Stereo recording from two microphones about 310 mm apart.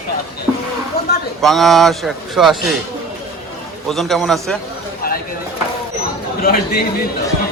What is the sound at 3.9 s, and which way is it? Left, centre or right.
Speech, centre.